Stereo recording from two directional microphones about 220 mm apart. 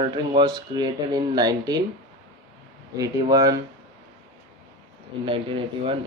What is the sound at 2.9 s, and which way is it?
Speech, 15° right (ahead or behind).